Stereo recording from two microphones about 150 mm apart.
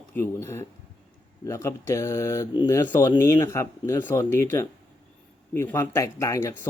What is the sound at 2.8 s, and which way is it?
Speech, 30° left (ahead or behind).